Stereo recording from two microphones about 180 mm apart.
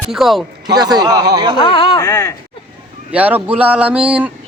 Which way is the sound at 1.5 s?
25° left (ahead or behind).